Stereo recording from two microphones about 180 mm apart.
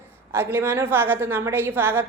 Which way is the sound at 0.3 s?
15° right (ahead or behind).